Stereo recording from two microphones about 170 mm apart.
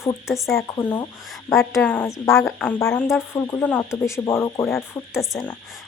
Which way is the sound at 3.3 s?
15° left (ahead or behind).